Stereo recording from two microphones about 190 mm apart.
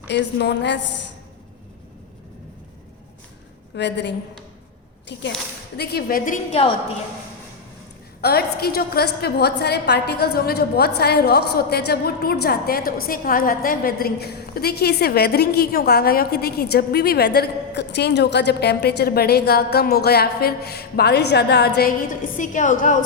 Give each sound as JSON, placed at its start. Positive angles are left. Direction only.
{"t": 0.1, "sound": "a woman's voice", "side_deg": 65}
{"t": 3.8, "sound": "a woman's voice", "side_deg": 65}
{"t": 5.7, "sound": "a woman's voice", "side_deg": 55}
{"t": 8.2, "sound": "a woman's voice", "side_deg": 55}